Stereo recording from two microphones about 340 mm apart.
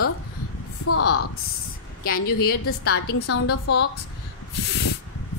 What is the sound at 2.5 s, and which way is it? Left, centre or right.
A woman's voice, left.